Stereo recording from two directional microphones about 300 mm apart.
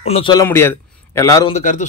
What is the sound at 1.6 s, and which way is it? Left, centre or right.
Speech, left.